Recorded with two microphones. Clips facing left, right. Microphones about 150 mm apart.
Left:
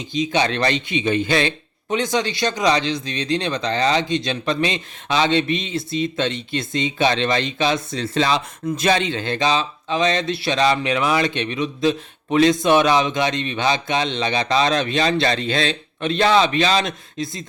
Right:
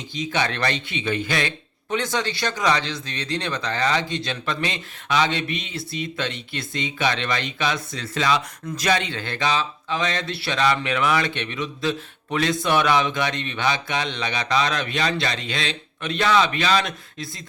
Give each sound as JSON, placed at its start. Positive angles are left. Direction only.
{"t": 0.0, "sound": "speech", "side_deg": 15}